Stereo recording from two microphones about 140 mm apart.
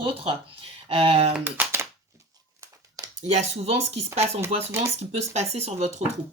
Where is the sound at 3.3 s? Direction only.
55° right (ahead or behind).